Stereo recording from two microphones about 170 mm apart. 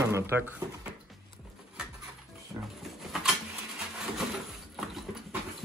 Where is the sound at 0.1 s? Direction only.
10° right (ahead or behind).